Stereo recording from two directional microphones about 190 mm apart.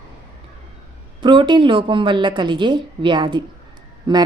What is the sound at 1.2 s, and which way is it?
Speech, 25° right (ahead or behind).